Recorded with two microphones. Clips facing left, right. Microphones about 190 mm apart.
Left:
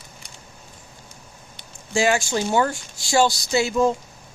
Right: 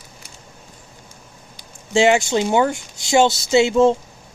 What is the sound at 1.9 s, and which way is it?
Speech, 25° right (ahead or behind).